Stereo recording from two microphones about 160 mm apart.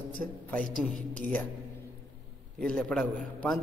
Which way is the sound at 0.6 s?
60° right (ahead or behind).